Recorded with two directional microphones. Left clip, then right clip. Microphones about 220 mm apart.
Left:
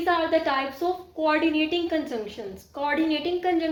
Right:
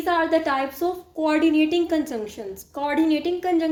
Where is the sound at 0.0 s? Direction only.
45° right (ahead or behind).